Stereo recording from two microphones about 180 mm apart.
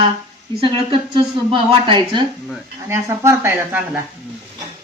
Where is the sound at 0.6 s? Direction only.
30° right (ahead or behind).